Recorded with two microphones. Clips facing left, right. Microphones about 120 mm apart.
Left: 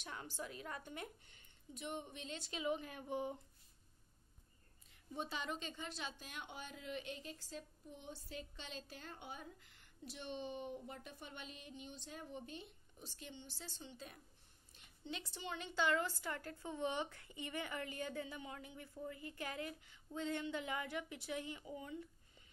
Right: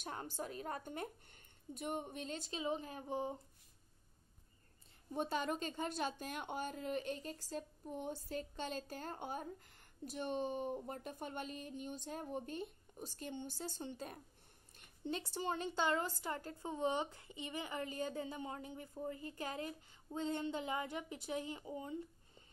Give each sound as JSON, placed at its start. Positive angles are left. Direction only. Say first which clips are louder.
{"t": 0.0, "sound": "a woman's voice", "louder": "right 4 dB", "side_deg": -45}
{"t": 5.1, "sound": "a woman's voice", "louder": "right 6 dB", "side_deg": -50}